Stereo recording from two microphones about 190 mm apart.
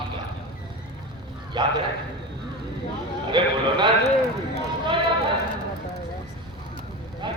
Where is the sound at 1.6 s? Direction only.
20° right (ahead or behind).